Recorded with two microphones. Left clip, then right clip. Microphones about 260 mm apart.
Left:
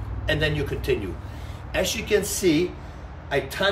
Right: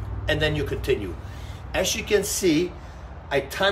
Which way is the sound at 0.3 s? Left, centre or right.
Centre.